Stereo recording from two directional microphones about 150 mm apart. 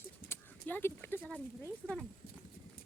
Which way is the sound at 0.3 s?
15° left (ahead or behind).